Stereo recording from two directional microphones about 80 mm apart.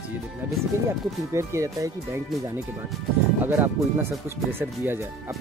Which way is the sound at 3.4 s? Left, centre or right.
Right.